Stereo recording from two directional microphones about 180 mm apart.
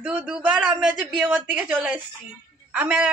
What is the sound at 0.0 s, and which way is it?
A man's voice, 5° right (ahead or behind).